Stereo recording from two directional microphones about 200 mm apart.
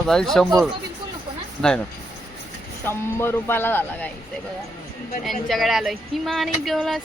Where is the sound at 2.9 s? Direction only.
10° left (ahead or behind).